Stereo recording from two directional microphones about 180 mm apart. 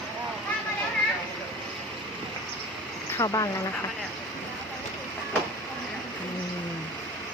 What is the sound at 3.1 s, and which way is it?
Speech, 20° left (ahead or behind).